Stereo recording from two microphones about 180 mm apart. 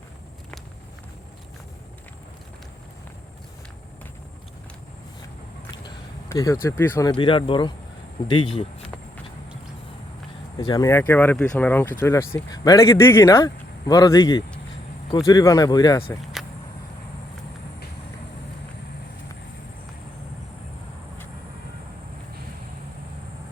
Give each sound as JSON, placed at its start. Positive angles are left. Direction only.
{"t": 5.7, "sound": "a sound", "side_deg": 20}
{"t": 7.1, "sound": "speech", "side_deg": 30}
{"t": 10.6, "sound": "speech", "side_deg": 20}
{"t": 16.2, "sound": "vehicle", "side_deg": 0}